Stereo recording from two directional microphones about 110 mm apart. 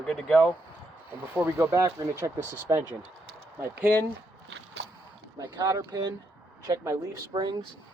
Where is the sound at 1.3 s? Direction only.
25° right (ahead or behind).